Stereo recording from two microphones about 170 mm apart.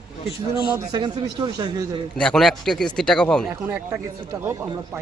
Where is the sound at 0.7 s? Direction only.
25° right (ahead or behind).